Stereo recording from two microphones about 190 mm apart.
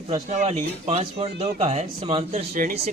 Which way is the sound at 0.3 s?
35° right (ahead or behind).